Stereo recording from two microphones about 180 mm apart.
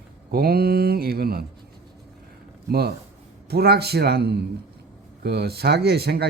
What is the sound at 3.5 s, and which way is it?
Mantra, 60° right (ahead or behind).